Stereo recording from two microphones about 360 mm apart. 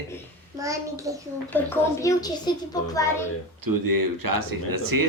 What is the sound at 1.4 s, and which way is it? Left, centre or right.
A child's voice, centre.